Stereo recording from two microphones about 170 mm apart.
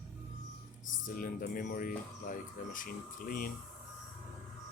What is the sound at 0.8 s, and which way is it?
Speech, 55° left (ahead or behind).